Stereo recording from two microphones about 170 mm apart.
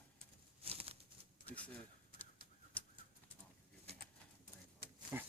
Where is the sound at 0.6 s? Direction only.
35° right (ahead or behind).